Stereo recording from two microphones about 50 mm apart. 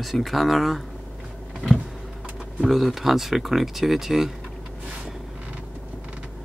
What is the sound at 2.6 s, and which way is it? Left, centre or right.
Speech, centre.